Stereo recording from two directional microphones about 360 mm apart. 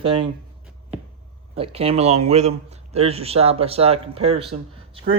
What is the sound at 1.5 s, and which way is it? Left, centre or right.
A man's voice, centre.